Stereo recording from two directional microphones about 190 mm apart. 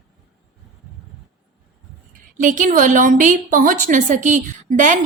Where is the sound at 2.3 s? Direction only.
40° right (ahead or behind).